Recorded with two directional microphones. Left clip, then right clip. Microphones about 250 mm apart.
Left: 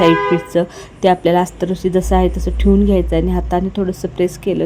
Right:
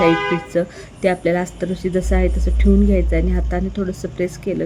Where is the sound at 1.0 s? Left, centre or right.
Centre.